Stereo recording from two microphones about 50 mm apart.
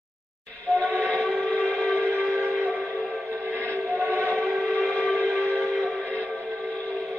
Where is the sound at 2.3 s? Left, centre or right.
Right.